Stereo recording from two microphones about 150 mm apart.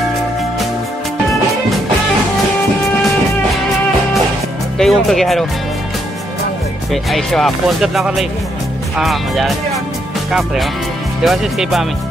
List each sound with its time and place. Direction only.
4.7 s speech: centre (ahead or behind)
6.9 s speech: centre (ahead or behind)